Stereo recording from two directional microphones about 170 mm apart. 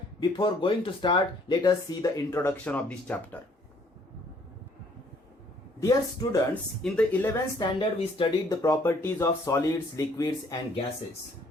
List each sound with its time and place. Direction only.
0.2 s speech: 30° left (ahead or behind); by 3.2 s 10° left (ahead or behind)
5.8 s speech: 20° left (ahead or behind)
6.5 s speech: 10° left (ahead or behind)
7.6 s speech: 30° left (ahead or behind)
8.6 s speech: 15° left (ahead or behind)